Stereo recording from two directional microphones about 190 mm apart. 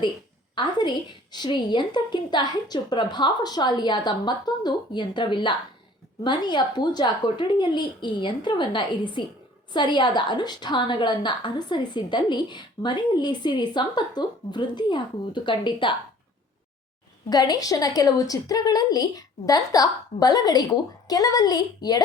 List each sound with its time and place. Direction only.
0.5 s a woman's voice: 25° left (ahead or behind)
17.2 s a woman's voice: 20° left (ahead or behind)